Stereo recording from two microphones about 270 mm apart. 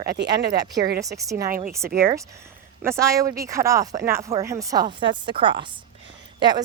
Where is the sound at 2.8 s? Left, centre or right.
Centre.